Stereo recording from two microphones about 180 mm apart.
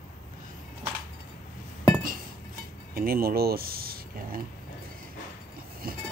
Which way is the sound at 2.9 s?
55° right (ahead or behind).